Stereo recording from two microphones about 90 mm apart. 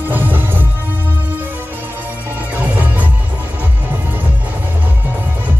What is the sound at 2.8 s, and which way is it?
Music, 20° right (ahead or behind).